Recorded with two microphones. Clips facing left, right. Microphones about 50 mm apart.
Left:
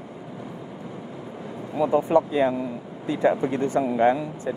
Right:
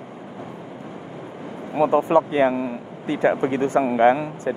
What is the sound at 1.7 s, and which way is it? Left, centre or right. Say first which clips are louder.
Speech: right 3 dB; right.